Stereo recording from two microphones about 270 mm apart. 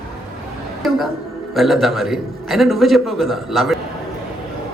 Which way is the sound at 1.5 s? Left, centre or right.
Centre.